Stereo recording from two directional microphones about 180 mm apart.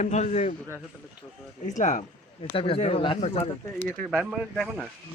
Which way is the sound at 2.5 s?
30° left (ahead or behind).